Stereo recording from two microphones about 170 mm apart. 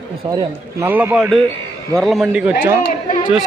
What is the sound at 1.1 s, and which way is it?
A man's voice, centre (ahead or behind).